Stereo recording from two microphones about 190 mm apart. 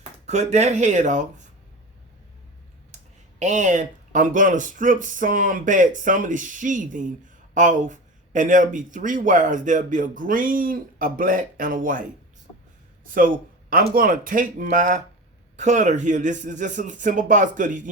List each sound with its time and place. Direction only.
0.3 s speech: 35° right (ahead or behind)
2.9 s speech: 40° right (ahead or behind)
13.1 s speech: 45° right (ahead or behind)